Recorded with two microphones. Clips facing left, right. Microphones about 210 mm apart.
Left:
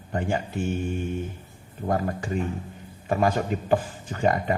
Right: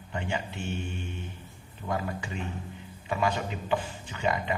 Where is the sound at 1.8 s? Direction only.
45° left (ahead or behind).